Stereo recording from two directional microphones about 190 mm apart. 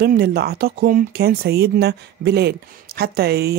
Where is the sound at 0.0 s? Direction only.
55° right (ahead or behind).